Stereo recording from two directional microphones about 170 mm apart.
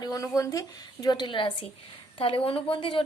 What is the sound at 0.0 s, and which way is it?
A woman's voice, 20° left (ahead or behind).